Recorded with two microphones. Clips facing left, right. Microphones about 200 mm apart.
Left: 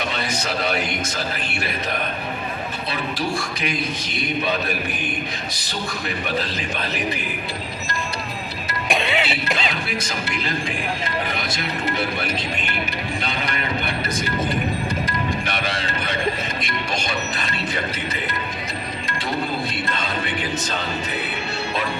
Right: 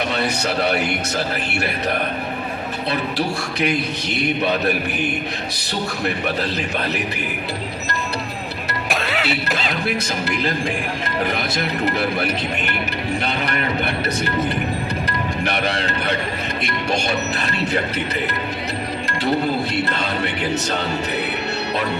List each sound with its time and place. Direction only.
0.1 s speech: 65° right (ahead or behind)
3.2 s a man's voice: 65° right (ahead or behind)
8.9 s music: centre (ahead or behind)
13.2 s speech: 65° right (ahead or behind)
15.4 s speech: 65° right (ahead or behind)
19.9 s speech: 65° right (ahead or behind)